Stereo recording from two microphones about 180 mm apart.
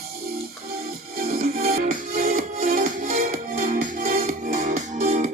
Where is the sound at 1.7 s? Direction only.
45° right (ahead or behind).